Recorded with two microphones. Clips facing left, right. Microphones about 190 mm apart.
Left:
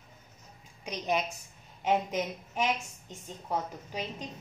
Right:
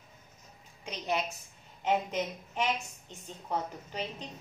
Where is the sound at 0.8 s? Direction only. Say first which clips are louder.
Left 2 dB; 15° left (ahead or behind).